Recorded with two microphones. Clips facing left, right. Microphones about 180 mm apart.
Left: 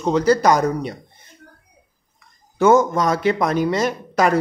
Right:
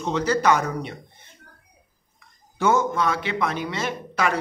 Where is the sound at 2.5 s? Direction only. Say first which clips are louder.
Left 7 dB; 45° left (ahead or behind).